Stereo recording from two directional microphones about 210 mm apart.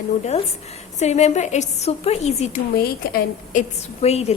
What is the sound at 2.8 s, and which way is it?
A woman's voice, 40° left (ahead or behind).